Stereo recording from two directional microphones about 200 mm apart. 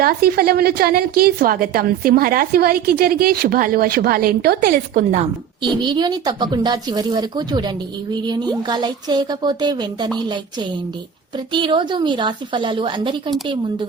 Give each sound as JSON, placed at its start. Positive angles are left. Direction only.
{"t": 0.0, "sound": "a woman's voice", "side_deg": -50}
{"t": 5.8, "sound": "speech", "side_deg": -20}
{"t": 11.5, "sound": "speech", "side_deg": -25}